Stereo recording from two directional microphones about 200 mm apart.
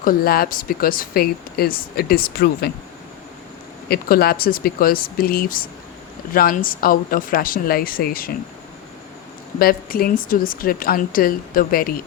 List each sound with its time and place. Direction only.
0.0 s speech: 45° left (ahead or behind)
3.8 s speech: 50° left (ahead or behind)
9.6 s speech: 45° left (ahead or behind)